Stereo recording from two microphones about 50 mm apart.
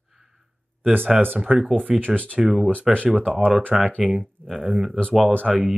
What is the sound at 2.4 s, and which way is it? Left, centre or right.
Speech, centre.